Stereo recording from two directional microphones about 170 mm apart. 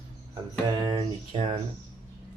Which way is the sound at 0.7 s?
25° right (ahead or behind).